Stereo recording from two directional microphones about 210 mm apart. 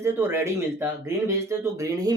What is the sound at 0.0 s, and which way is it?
Speech, 10° right (ahead or behind).